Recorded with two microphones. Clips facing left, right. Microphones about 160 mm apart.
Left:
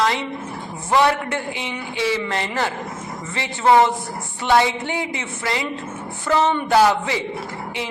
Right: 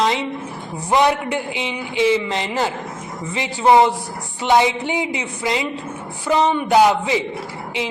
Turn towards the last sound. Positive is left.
turn(degrees=-15)  # may be behind; listen again after turning